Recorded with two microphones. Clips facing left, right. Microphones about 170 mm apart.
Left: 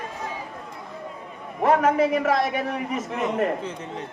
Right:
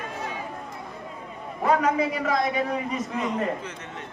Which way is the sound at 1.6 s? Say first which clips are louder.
Left 3 dB; 50° left (ahead or behind).